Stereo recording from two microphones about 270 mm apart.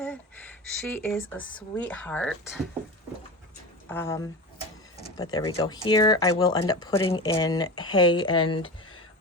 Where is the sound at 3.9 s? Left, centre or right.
Centre.